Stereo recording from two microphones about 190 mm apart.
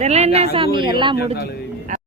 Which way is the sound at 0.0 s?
35° right (ahead or behind).